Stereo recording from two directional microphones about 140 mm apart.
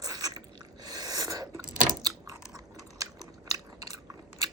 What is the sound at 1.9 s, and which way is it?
Chewing, 25° right (ahead or behind).